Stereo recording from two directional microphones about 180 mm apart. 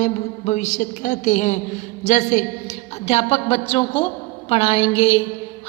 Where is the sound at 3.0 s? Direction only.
35° left (ahead or behind).